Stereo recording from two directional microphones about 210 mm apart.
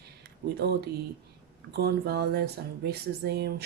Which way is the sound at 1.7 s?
50° right (ahead or behind).